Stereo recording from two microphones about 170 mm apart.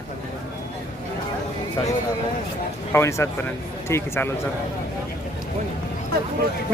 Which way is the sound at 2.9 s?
15° left (ahead or behind).